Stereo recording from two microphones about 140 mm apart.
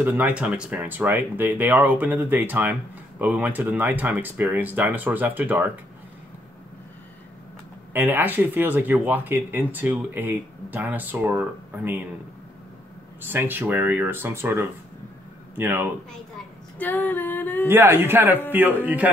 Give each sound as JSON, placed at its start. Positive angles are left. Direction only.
{"t": 0.0, "sound": "speech", "side_deg": -10}
{"t": 7.9, "sound": "speech", "side_deg": -15}
{"t": 13.2, "sound": "speech", "side_deg": -15}
{"t": 16.7, "sound": "female singing", "side_deg": 15}
{"t": 17.6, "sound": "speech", "side_deg": -15}